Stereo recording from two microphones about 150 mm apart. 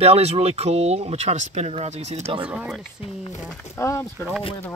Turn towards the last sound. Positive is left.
turn(degrees=15)  # may be behind; listen again after turning